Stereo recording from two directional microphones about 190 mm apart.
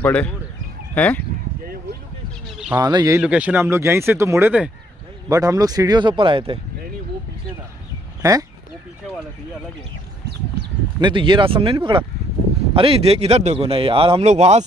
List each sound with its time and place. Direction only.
0.0 s speech: 5° left (ahead or behind)
2.8 s speech: 20° right (ahead or behind)
3.2 s speech: 5° right (ahead or behind); by 6.6 s 30° right (ahead or behind)
8.2 s speech: 15° right (ahead or behind)
11.0 s speech: 25° right (ahead or behind)